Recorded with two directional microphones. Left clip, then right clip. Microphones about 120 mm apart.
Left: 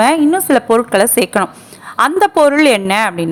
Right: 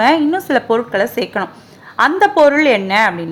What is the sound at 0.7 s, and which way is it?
A woman's voice, 40° left (ahead or behind).